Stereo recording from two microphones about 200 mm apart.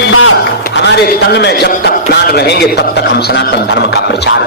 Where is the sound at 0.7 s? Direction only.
60° left (ahead or behind).